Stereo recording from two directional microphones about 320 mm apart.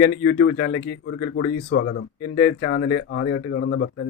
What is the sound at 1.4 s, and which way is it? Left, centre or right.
Speech, left.